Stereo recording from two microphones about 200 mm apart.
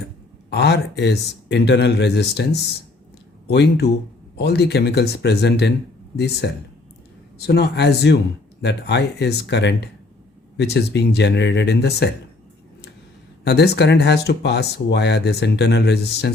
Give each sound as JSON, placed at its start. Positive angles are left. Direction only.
{"t": 0.5, "sound": "speech", "side_deg": 60}
{"t": 13.4, "sound": "speech", "side_deg": 55}